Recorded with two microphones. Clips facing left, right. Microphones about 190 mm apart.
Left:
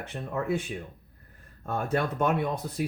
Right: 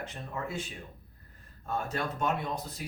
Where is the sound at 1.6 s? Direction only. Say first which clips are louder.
Left 5 dB; 55° left (ahead or behind).